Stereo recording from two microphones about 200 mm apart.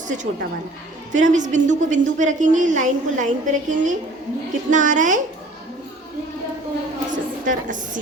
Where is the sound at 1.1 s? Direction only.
40° right (ahead or behind).